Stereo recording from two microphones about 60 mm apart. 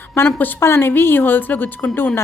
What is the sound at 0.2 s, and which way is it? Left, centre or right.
A woman's voice, left.